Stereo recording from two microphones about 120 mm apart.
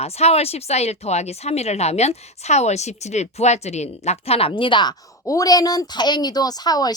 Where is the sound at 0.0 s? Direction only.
60° left (ahead or behind); by 4.9 s 40° left (ahead or behind).